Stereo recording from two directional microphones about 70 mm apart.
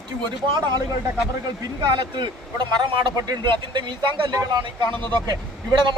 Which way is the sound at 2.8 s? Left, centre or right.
Right.